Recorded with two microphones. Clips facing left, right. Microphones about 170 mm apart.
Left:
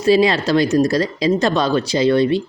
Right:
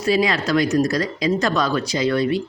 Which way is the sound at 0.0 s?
30° left (ahead or behind).